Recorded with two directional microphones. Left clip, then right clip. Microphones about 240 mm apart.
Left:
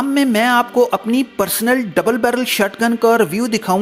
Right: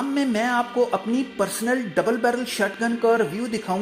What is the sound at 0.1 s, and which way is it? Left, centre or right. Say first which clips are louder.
Speech: left 9 dB; left.